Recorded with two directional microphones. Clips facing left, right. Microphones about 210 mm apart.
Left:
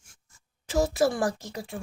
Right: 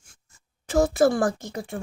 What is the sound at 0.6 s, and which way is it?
Speech, 50° right (ahead or behind).